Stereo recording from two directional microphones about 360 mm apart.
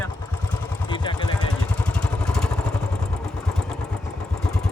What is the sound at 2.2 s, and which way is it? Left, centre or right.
Vehicle, centre.